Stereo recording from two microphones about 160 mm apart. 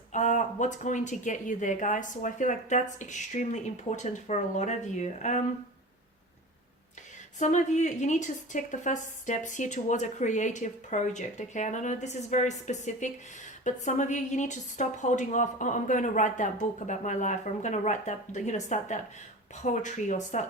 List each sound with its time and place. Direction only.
0.1 s a woman's voice: 50° left (ahead or behind)
7.3 s a woman's voice: 50° left (ahead or behind)